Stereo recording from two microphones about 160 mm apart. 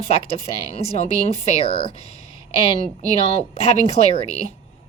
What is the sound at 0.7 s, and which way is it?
Speech, 40° left (ahead or behind).